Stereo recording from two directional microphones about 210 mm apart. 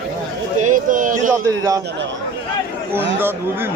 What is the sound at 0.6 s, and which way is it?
Speech, 40° right (ahead or behind).